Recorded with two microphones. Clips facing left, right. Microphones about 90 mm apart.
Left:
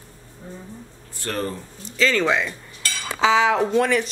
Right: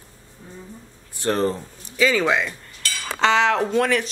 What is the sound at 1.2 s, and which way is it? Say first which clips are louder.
Speech: right 6 dB; 25° right (ahead or behind).